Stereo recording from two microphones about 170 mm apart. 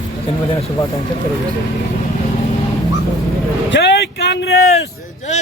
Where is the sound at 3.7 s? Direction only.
90° left.